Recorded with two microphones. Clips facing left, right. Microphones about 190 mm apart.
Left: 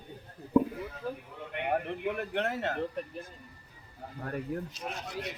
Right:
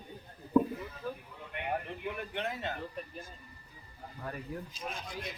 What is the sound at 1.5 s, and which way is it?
A man's voice, 70° left (ahead or behind).